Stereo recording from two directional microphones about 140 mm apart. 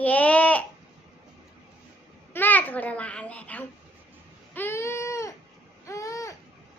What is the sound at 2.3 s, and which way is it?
A child's voice, 10° left (ahead or behind).